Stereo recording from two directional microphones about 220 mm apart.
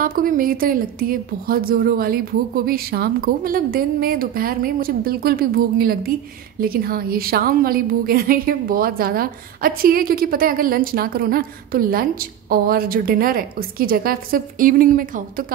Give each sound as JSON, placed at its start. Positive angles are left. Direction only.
{"t": 0.0, "sound": "a woman's voice", "side_deg": -40}